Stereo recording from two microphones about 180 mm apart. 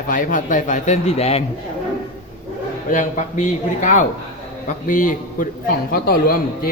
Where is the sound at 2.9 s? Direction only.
45° left (ahead or behind).